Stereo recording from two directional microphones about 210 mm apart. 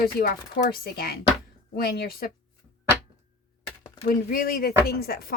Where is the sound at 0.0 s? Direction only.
45° left (ahead or behind).